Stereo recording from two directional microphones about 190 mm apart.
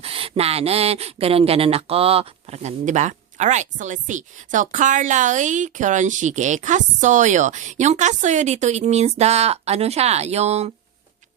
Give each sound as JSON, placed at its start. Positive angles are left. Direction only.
{"t": 0.0, "sound": "speech", "side_deg": -30}